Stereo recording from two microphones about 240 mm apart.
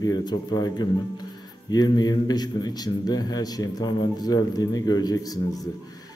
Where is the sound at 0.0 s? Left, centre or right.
Centre.